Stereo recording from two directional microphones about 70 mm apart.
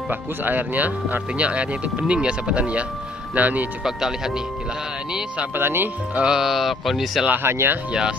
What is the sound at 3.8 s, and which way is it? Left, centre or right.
Speech, centre.